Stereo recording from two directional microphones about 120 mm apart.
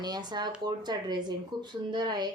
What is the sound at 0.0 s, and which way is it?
Speech, 35° right (ahead or behind).